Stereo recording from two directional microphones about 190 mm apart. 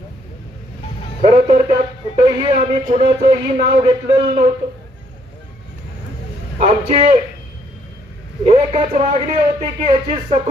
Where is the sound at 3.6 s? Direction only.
30° right (ahead or behind).